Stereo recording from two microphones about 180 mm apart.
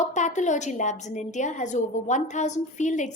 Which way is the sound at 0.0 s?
40° left (ahead or behind).